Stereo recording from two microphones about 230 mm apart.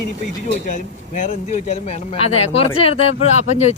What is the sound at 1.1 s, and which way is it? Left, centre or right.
Speech, left.